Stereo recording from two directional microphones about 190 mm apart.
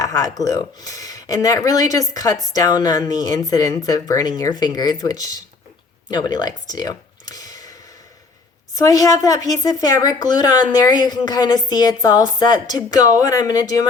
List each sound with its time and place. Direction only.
0.0 s speech: 20° left (ahead or behind)
8.7 s speech: 20° left (ahead or behind)